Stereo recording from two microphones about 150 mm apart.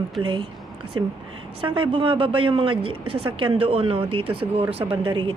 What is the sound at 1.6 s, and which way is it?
A woman's voice, 35° right (ahead or behind).